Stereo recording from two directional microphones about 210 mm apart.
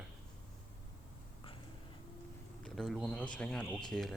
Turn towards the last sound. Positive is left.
turn(degrees=0)  # may be behind; listen again after turning